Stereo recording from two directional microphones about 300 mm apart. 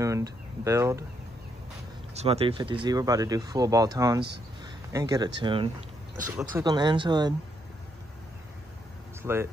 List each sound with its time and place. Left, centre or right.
0.0 s speech: centre
2.1 s speech: centre
9.2 s speech: centre